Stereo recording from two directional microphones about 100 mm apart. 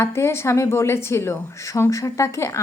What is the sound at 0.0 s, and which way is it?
A woman's voice, 25° left (ahead or behind).